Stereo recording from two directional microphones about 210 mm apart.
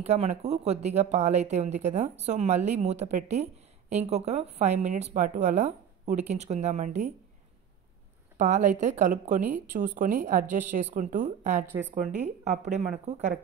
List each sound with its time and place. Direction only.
0.0 s speech: 30° right (ahead or behind)
8.4 s speech: 35° right (ahead or behind)